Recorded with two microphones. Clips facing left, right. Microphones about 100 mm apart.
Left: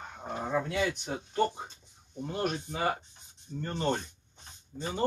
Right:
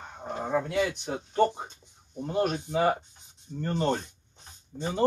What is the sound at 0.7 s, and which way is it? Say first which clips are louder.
Speech: right 3 dB; 30° right (ahead or behind).